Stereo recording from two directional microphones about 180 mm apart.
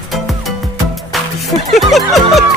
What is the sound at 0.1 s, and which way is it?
Music, centre (ahead or behind).